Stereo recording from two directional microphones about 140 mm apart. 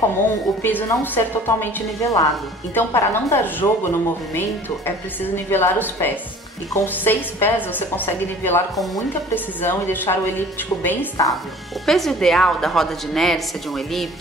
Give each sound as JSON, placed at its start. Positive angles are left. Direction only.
{"t": 0.6, "sound": "a woman's voice", "side_deg": 15}
{"t": 11.8, "sound": "a woman's voice", "side_deg": 0}